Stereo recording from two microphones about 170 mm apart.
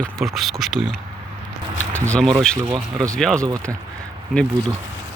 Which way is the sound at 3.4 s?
20° right (ahead or behind).